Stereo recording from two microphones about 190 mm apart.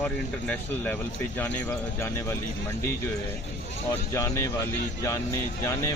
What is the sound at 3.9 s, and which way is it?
Speech, 15° left (ahead or behind).